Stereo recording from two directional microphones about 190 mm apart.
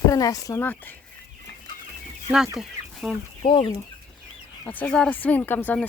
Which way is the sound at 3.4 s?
25° left (ahead or behind).